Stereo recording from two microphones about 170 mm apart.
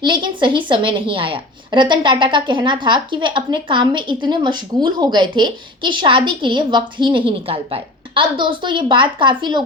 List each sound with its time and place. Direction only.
0.0 s a woman's voice: 30° right (ahead or behind)